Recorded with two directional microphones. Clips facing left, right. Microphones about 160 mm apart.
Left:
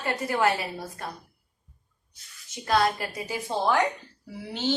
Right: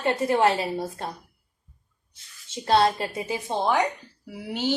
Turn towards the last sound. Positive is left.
turn(degrees=-10)  # may be behind; listen again after turning